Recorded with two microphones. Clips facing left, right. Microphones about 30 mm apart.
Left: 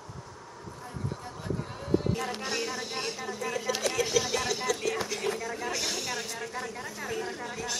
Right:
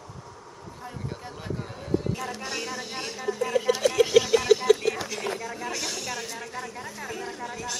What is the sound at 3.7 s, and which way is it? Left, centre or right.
Speech, right.